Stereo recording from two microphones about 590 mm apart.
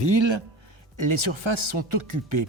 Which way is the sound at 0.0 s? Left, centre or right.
Right.